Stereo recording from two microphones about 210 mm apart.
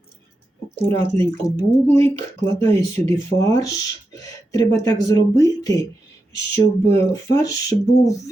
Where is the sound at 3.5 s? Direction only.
15° left (ahead or behind).